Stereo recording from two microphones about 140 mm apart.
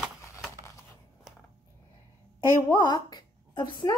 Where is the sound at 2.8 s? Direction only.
30° left (ahead or behind).